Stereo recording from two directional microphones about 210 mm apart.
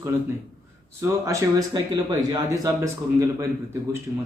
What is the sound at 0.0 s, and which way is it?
Speech, 10° right (ahead or behind).